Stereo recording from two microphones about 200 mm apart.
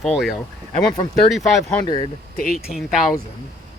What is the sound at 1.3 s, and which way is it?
Speech, centre (ahead or behind).